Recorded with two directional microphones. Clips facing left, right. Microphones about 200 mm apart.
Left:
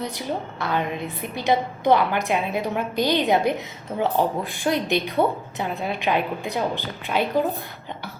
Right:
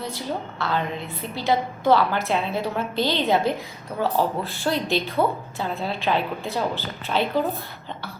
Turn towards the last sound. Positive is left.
turn(degrees=15)  # may be behind; listen again after turning